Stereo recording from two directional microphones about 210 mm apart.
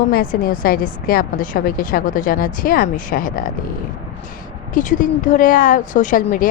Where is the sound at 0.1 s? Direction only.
45° left (ahead or behind).